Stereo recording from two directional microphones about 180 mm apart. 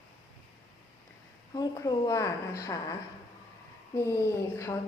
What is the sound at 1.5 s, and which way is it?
A woman's voice, 20° left (ahead or behind).